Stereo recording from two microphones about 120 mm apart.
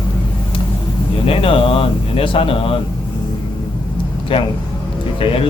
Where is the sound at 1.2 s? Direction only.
50° left (ahead or behind).